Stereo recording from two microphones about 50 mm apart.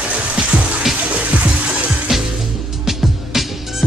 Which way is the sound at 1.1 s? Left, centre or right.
Right.